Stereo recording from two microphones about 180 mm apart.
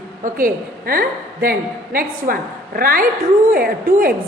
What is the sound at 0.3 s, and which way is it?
A woman's voice, 50° right (ahead or behind).